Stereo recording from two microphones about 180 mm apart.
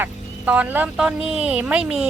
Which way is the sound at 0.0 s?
10° right (ahead or behind).